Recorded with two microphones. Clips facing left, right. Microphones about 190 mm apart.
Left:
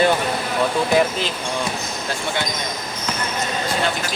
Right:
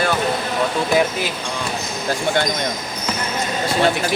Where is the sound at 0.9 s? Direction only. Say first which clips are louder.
Even; centre (ahead or behind).